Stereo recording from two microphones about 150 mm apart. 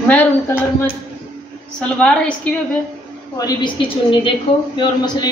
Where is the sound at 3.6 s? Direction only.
35° left (ahead or behind).